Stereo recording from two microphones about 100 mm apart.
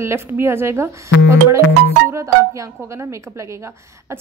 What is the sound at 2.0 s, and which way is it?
Speech, 30° right (ahead or behind).